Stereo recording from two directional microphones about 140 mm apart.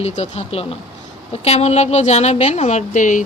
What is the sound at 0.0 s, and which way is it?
A woman's voice, 50° left (ahead or behind).